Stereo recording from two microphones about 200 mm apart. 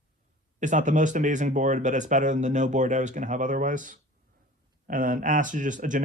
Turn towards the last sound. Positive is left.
turn(degrees=-40)  # may be behind; listen again after turning